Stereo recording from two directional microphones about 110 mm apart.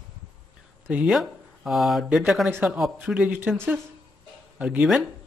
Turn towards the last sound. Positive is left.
turn(degrees=-5)  # may be behind; listen again after turning